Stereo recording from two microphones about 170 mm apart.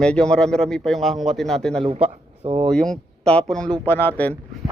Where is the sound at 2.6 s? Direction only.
5° left (ahead or behind).